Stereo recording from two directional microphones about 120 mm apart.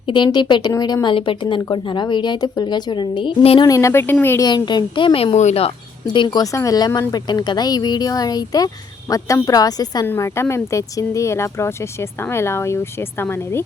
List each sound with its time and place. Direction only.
0.1 s speech: 40° left (ahead or behind)
1.0 s speech: 45° left (ahead or behind)
3.6 s speech: 25° left (ahead or behind)
4.4 s a woman's voice: 35° left (ahead or behind); by 5.7 s 65° left (ahead or behind)
6.1 s speech: 35° left (ahead or behind)
10.1 s speech: 25° left (ahead or behind)